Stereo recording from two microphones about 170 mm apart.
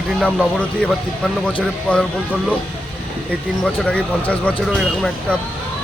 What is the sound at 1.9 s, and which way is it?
Speech, 5° left (ahead or behind).